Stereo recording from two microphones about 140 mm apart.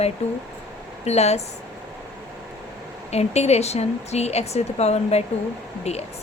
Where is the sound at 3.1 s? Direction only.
50° left (ahead or behind).